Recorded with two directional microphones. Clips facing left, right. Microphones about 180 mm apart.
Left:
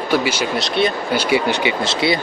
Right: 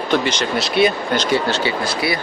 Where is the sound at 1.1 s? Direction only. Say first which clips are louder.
Left 1 dB; 10° left (ahead or behind).